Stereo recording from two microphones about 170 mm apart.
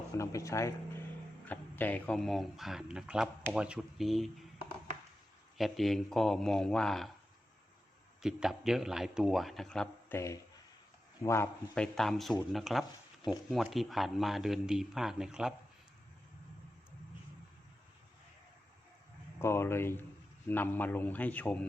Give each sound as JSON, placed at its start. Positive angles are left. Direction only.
{"t": 0.2, "sound": "speech", "side_deg": 20}
{"t": 5.5, "sound": "speech", "side_deg": 0}
{"t": 8.2, "sound": "speech", "side_deg": -5}
{"t": 11.2, "sound": "speech", "side_deg": 15}
{"t": 19.4, "sound": "a man's voice", "side_deg": 15}